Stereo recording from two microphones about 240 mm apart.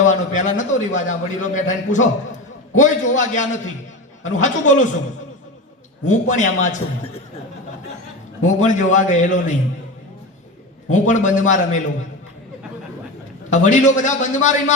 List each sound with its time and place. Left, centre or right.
0.0 s a man's voice: left
6.1 s a man's voice: left
8.4 s a man's voice: left
10.8 s a man's voice: left
13.5 s a man's voice: left